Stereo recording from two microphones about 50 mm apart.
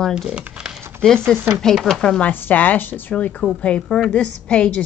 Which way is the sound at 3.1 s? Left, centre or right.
Left.